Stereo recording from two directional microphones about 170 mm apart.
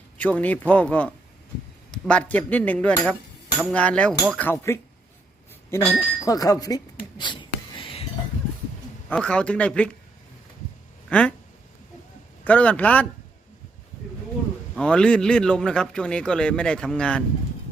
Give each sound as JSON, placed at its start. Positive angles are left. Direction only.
{"t": 0.2, "sound": "speech", "side_deg": 10}
{"t": 6.2, "sound": "a sound", "side_deg": 20}
{"t": 9.0, "sound": "speech", "side_deg": 5}
{"t": 11.1, "sound": "speech", "side_deg": 5}
{"t": 12.5, "sound": "speech", "side_deg": 10}
{"t": 14.8, "sound": "speech", "side_deg": 5}